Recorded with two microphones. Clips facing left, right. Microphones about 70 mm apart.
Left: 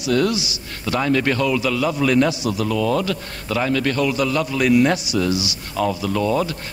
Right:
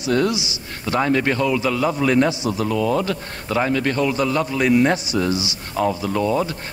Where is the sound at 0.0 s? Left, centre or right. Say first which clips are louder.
Even; right.